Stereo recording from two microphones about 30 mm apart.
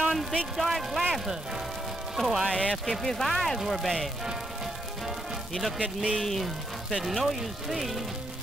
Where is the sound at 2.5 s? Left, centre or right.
Left.